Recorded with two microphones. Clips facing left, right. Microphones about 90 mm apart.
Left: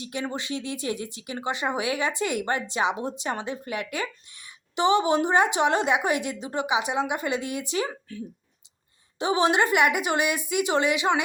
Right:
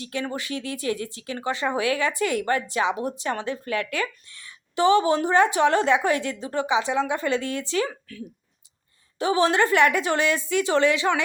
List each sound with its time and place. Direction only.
0.0 s speech: 20° left (ahead or behind)
7.9 s a woman's voice: 30° left (ahead or behind)